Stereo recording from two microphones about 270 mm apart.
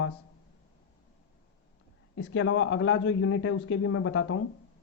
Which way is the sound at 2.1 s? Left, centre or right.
Left.